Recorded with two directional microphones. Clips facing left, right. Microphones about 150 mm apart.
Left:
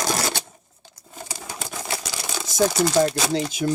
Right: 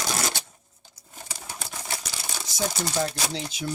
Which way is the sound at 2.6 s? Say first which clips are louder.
Left 9 dB; 90° left.